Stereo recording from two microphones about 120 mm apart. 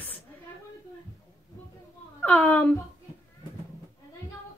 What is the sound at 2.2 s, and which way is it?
Speech, 10° left (ahead or behind).